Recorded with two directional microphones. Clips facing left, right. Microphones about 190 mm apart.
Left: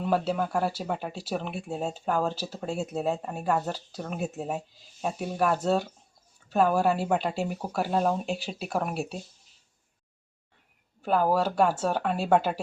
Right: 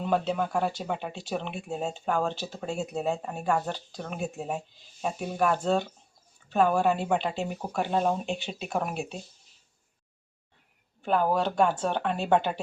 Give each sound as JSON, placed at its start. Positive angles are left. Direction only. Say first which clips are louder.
{"t": 0.0, "sound": "speech", "louder": "even", "side_deg": 5}
{"t": 2.3, "sound": "speech", "louder": "left 1 dB", "side_deg": 35}
{"t": 2.6, "sound": "speech", "louder": "left 1 dB", "side_deg": 0}
{"t": 11.0, "sound": "speech", "louder": "left 1 dB", "side_deg": 5}